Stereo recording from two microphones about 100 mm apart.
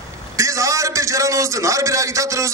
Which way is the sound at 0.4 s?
30° right (ahead or behind).